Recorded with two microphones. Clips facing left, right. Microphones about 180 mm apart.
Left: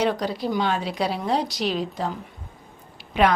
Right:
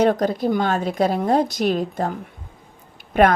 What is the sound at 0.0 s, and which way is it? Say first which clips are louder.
Speech: right 6 dB; 50° right (ahead or behind).